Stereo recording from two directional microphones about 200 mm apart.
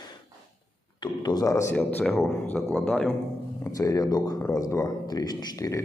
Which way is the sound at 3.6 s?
15° left (ahead or behind).